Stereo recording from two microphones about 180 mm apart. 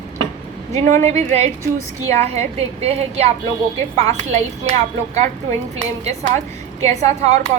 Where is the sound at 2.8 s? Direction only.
35° right (ahead or behind).